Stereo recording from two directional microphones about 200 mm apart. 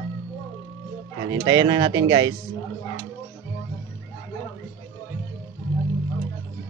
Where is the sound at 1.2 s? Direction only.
20° right (ahead or behind).